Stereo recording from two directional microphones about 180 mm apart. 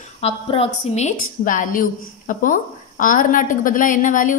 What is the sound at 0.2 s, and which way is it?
Speech, 35° left (ahead or behind).